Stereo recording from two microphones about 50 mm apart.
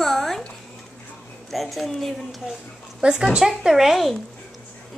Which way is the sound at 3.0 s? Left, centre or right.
Centre.